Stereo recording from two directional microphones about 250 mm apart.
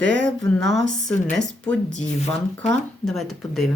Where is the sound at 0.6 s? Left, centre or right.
Right.